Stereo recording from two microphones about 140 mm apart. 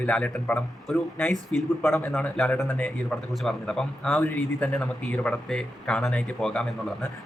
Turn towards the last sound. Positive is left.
turn(degrees=5)  # may be behind; listen again after turning